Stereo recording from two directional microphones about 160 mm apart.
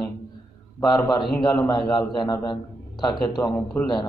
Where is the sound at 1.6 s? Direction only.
25° left (ahead or behind).